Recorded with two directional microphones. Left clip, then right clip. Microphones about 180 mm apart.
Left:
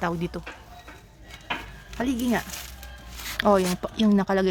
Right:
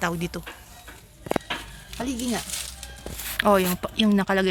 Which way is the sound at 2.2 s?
10° left (ahead or behind).